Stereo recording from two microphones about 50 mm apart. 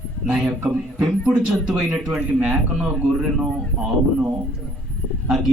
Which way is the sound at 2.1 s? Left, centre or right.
Right.